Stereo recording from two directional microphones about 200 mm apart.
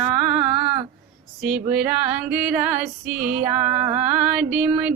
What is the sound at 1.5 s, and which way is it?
Female singing, 5° right (ahead or behind).